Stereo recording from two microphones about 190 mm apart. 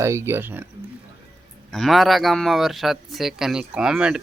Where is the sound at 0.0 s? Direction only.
15° right (ahead or behind).